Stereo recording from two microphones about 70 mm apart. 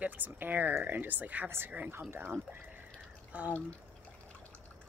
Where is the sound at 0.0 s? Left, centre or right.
Right.